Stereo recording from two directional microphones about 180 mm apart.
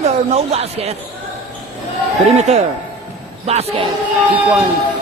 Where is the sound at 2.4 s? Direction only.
40° right (ahead or behind).